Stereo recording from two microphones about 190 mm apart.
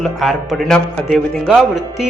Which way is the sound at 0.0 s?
Centre (ahead or behind).